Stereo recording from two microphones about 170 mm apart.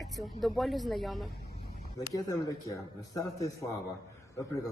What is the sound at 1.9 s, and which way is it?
A man's voice, 20° left (ahead or behind).